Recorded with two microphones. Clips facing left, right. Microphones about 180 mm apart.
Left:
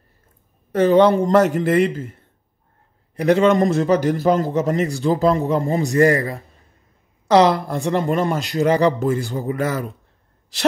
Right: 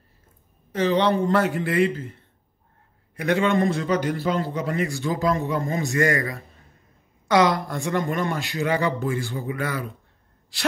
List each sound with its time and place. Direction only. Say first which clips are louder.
0.7 s a man's voice: left 7 dB; 50° left (ahead or behind)
3.2 s a man's voice: left 6 dB; 40° left (ahead or behind)
7.6 s a man's voice: left 5 dB; 35° left (ahead or behind)